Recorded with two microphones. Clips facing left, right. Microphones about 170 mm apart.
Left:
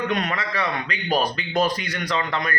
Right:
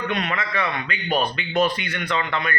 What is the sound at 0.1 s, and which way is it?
A man's voice, 40° left (ahead or behind).